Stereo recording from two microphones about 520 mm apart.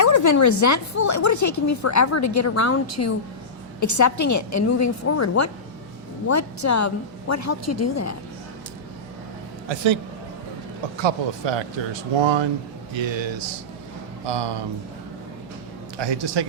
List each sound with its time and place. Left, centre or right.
0.0 s speech: left
9.6 s speech: right
11.0 s speech: right
16.0 s speech: right